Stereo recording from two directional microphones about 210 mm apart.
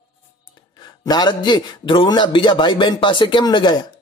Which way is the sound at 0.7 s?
20° left (ahead or behind).